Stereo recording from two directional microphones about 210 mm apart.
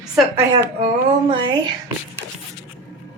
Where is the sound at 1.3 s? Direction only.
25° right (ahead or behind).